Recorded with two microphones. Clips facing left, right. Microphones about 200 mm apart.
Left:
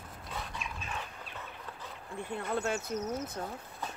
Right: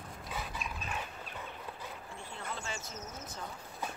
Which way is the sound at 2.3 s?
60° left (ahead or behind).